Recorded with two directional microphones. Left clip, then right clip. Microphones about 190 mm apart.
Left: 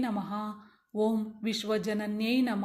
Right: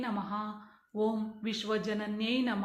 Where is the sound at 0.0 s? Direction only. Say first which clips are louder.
Left 2 dB; 45° left (ahead or behind).